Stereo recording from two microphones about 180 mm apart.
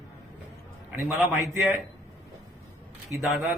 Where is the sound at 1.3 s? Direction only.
Centre (ahead or behind).